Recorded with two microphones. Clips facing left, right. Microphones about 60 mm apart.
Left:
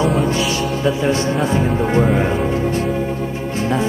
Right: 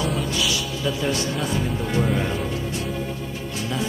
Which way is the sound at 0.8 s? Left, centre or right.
Left.